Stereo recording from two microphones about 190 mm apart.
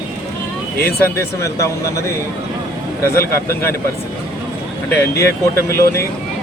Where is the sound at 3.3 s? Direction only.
15° left (ahead or behind).